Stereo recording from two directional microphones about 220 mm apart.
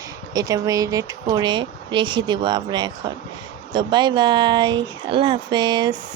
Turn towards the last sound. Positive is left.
turn(degrees=-20)  # may be behind; listen again after turning